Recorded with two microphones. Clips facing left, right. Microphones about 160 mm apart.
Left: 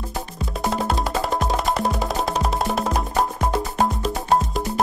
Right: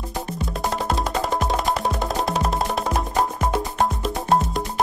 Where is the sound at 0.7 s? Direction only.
Centre (ahead or behind).